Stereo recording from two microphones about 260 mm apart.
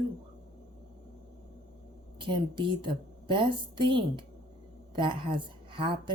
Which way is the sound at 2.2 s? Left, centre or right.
Centre.